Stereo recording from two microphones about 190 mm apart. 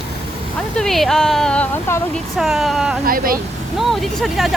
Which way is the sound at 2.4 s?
Centre (ahead or behind).